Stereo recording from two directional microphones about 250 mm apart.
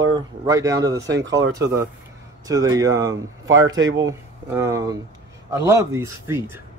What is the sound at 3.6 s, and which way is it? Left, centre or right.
Speech, right.